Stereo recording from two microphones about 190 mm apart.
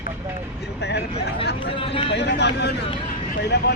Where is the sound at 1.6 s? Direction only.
30° left (ahead or behind).